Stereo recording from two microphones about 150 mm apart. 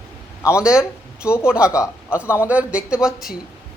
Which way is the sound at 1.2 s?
15° left (ahead or behind).